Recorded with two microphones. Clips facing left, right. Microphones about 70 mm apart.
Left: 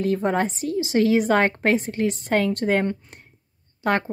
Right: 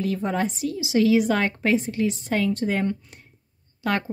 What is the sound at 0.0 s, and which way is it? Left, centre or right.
Speech, left.